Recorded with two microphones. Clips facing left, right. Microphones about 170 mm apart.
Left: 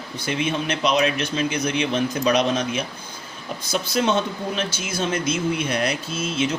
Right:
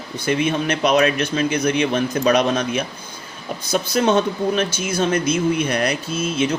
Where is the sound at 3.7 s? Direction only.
45° right (ahead or behind).